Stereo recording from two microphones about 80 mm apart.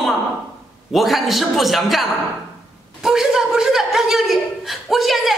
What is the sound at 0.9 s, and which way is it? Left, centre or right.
A woman's voice, centre.